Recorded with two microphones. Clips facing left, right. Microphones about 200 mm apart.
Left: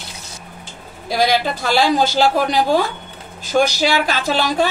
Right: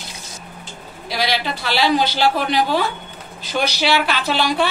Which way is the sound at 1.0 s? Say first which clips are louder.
Left 5 dB; 50° left (ahead or behind).